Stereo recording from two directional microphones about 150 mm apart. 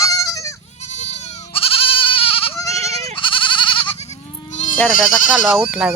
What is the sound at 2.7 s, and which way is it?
Goat, 45° right (ahead or behind).